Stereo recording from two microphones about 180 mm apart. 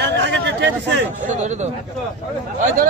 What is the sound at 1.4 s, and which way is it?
Speech, 40° right (ahead or behind).